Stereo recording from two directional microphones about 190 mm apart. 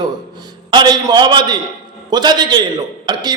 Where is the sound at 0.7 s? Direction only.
20° right (ahead or behind).